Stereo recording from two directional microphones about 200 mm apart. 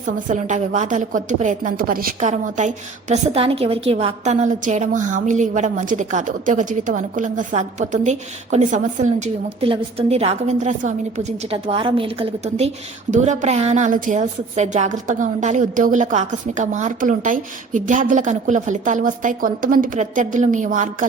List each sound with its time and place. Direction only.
0.3 s a woman's voice: 35° right (ahead or behind)